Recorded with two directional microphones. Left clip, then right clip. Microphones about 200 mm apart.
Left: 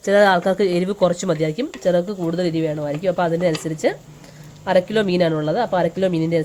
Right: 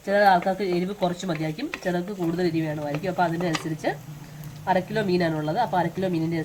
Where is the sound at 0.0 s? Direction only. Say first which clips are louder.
Left 4 dB; 60° left (ahead or behind).